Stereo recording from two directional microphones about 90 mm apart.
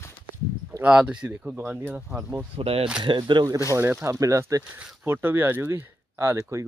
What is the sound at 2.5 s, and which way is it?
Speech, 90° right.